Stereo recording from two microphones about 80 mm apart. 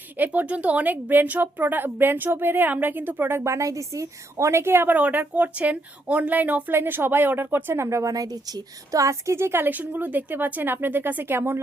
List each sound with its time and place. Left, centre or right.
0.2 s speech: centre